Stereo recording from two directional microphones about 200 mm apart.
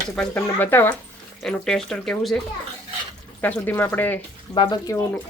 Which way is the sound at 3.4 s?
10° left (ahead or behind).